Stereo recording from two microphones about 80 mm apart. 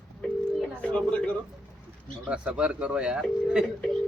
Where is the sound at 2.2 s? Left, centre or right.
Centre.